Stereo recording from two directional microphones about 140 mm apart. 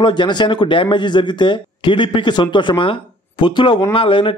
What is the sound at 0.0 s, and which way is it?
Speech, 35° left (ahead or behind).